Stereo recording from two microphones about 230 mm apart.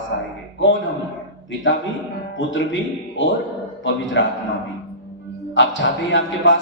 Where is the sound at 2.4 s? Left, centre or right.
Left.